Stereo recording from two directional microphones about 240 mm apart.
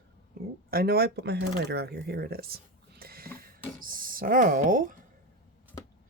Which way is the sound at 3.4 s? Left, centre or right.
Right.